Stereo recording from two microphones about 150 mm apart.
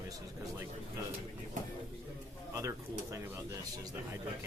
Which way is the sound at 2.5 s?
20° right (ahead or behind).